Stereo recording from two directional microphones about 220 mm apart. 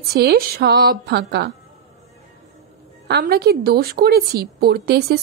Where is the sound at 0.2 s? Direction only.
45° right (ahead or behind).